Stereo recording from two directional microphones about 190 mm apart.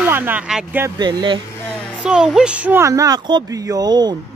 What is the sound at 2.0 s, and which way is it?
Speech, 5° right (ahead or behind).